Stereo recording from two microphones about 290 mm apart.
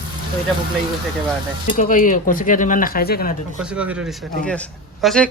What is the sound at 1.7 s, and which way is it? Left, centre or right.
Speech, left.